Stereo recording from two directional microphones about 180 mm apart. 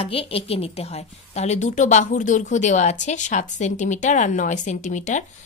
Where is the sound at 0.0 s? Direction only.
30° left (ahead or behind).